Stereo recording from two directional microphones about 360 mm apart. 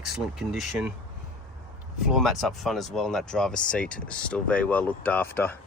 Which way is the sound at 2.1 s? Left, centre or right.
Centre.